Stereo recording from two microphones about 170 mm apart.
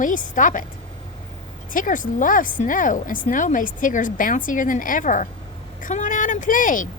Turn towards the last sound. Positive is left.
turn(degrees=50)  # may be behind; listen again after turning